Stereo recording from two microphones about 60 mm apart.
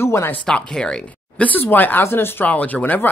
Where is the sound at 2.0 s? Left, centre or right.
Left.